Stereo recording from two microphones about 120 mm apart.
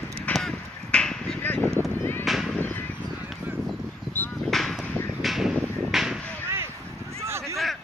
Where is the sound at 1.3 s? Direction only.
15° left (ahead or behind).